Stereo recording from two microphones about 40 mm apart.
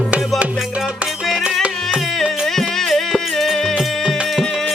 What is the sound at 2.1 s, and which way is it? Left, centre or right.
Music, centre.